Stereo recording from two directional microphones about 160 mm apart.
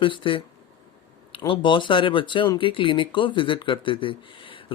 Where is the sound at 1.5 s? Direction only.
30° left (ahead or behind).